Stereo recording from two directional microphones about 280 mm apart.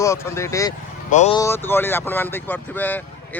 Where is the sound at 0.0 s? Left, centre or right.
Centre.